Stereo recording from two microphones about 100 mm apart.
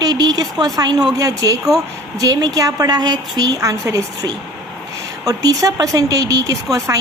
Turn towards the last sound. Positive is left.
turn(degrees=-35)  # may be behind; listen again after turning